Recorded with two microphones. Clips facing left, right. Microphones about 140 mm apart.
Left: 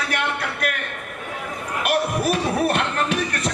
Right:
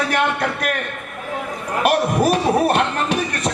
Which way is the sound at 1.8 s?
30° right (ahead or behind).